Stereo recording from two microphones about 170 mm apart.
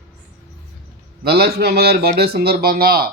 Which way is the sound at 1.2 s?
65° right (ahead or behind).